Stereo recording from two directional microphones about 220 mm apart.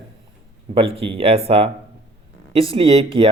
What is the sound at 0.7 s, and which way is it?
A man's voice, 25° right (ahead or behind).